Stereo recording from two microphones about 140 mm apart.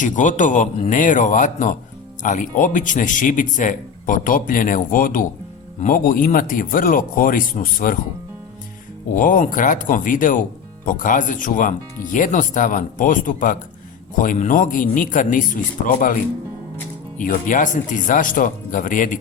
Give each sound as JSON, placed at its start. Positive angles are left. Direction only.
{"t": 0.0, "sound": "a man's voice", "side_deg": 65}
{"t": 9.1, "sound": "speech", "side_deg": 75}
{"t": 17.2, "sound": "speech", "side_deg": 70}